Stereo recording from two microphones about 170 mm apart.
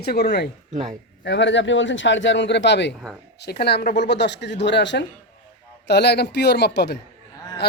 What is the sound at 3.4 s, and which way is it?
Speech, 75° left (ahead or behind).